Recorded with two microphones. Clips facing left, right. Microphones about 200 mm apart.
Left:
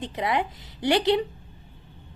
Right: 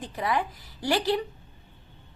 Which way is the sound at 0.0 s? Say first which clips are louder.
Left 2 dB; 20° left (ahead or behind).